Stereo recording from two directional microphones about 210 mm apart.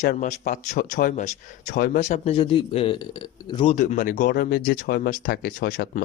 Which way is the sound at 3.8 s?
35° left (ahead or behind).